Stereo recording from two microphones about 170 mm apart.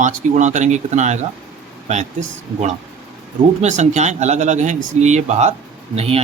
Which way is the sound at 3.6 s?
45° right (ahead or behind).